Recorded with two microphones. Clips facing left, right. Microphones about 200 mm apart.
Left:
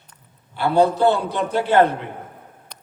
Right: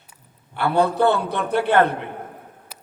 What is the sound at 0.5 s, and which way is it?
A man's voice, 60° right (ahead or behind).